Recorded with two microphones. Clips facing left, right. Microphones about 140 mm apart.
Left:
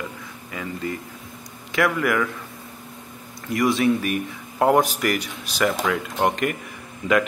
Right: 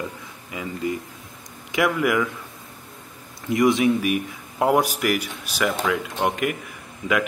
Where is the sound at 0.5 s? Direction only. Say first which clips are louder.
Right 2 dB; 15° right (ahead or behind).